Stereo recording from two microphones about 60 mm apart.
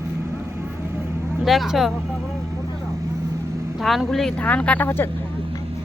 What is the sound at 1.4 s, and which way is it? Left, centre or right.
Speech, centre.